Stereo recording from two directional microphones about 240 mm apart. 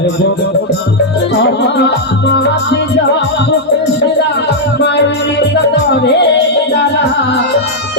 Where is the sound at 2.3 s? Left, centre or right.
Left.